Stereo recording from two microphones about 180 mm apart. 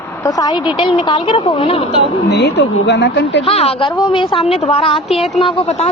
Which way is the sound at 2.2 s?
75° left (ahead or behind).